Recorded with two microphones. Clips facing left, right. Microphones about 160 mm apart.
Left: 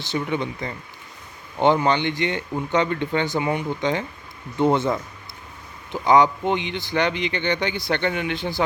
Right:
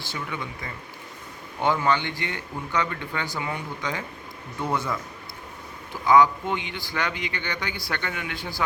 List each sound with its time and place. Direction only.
0.0 s a man's voice: 25° left (ahead or behind)